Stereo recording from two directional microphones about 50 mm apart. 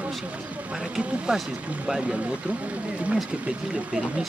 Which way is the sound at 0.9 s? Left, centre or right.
Centre.